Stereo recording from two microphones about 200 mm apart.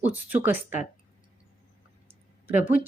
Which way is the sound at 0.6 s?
40° left (ahead or behind).